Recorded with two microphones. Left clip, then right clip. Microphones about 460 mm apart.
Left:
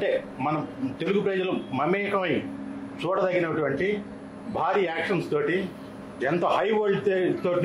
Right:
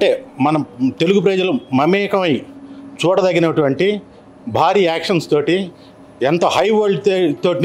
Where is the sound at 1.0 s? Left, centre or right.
Right.